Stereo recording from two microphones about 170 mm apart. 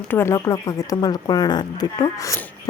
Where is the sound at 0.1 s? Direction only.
15° left (ahead or behind).